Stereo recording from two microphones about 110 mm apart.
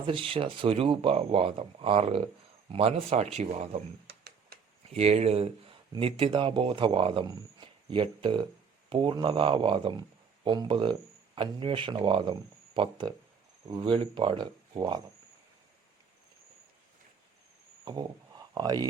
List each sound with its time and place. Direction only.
0.0 s speech: 55° right (ahead or behind); by 3.8 s 85° right
4.9 s speech: 75° right (ahead or behind)
6.0 s speech: 55° right (ahead or behind)
17.8 s speech: 40° right (ahead or behind)